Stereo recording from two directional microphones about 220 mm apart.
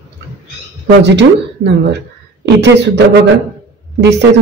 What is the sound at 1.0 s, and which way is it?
A woman's voice, 55° right (ahead or behind).